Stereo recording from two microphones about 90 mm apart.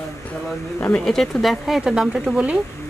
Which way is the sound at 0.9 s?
5° left (ahead or behind).